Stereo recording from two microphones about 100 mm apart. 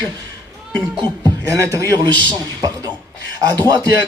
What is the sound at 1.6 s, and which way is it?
Speech, 30° right (ahead or behind).